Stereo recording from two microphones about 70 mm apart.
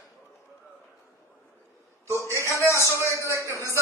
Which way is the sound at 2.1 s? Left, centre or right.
Left.